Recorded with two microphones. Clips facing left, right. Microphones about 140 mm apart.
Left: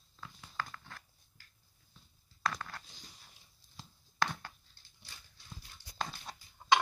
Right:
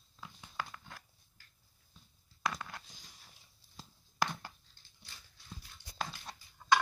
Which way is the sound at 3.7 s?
5° right (ahead or behind).